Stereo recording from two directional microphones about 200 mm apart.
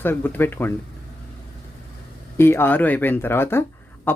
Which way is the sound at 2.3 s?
10° left (ahead or behind).